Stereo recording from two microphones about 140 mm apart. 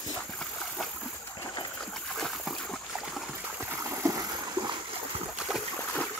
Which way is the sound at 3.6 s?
15° right (ahead or behind).